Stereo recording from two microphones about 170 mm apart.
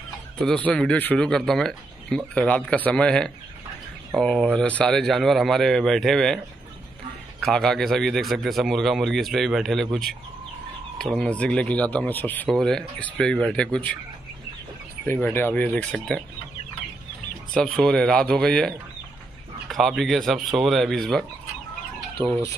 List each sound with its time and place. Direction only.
0.4 s speech: 5° left (ahead or behind)
15.0 s speech: 10° left (ahead or behind)
17.7 s speech: 5° left (ahead or behind)
22.2 s speech: 5° left (ahead or behind)